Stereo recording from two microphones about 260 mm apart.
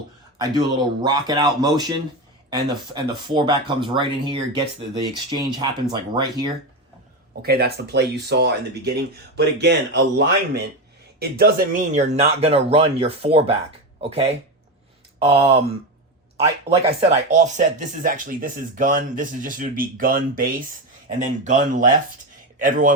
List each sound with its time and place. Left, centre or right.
0.3 s speech: centre
7.4 s speech: right
16.6 s a man's voice: right